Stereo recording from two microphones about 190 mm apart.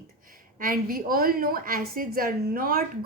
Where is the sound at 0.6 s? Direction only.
50° right (ahead or behind).